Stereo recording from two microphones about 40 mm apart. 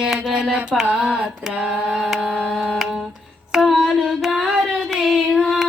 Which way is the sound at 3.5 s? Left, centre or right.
Centre.